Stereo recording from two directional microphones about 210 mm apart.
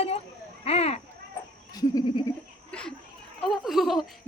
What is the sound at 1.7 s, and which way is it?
Goat, 20° left (ahead or behind).